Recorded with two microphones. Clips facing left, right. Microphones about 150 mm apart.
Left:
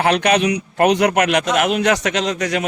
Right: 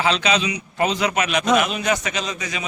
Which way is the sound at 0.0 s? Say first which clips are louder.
Left 5 dB; 60° left (ahead or behind).